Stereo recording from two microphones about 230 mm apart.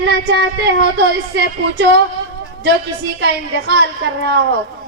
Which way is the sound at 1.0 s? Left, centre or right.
Right.